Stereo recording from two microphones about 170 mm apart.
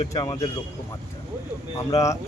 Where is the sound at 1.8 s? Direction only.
20° left (ahead or behind).